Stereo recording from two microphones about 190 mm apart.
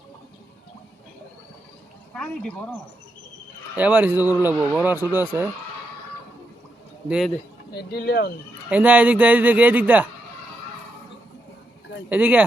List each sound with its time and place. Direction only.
2.1 s speech: 5° left (ahead or behind)
3.8 s speech: 10° right (ahead or behind)
7.1 s speech: centre (ahead or behind)
7.7 s speech: 60° left (ahead or behind)
8.7 s speech: 5° right (ahead or behind)
12.0 s speech: 10° right (ahead or behind)